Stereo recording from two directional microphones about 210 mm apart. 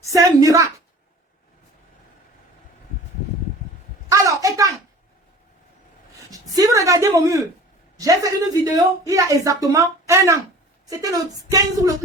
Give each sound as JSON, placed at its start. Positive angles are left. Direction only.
{"t": 0.0, "sound": "a woman's voice", "side_deg": -15}
{"t": 4.1, "sound": "a sound", "side_deg": -15}
{"t": 6.3, "sound": "a woman's voice", "side_deg": -15}